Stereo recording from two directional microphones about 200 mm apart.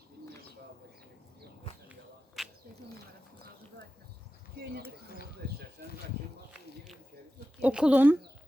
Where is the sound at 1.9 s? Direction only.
Centre (ahead or behind).